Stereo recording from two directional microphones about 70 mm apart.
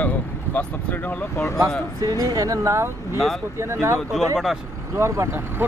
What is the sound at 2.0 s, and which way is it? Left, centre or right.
Speech, right.